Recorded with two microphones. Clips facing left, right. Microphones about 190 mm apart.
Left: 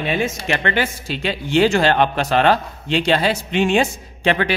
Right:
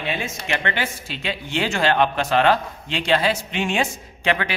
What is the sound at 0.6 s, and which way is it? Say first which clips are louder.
Speech: left 5 dB; 40° left (ahead or behind).